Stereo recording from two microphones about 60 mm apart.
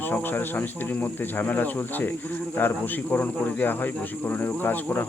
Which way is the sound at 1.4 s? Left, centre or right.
Left.